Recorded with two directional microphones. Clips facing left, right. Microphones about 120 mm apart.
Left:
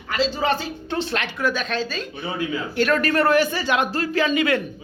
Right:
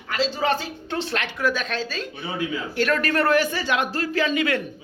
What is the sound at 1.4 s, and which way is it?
Speech, 5° right (ahead or behind).